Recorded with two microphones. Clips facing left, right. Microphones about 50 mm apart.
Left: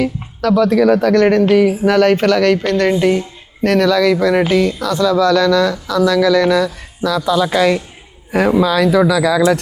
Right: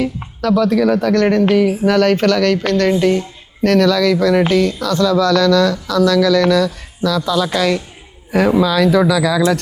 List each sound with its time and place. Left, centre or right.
0.6 s speech: left
1.5 s speech: centre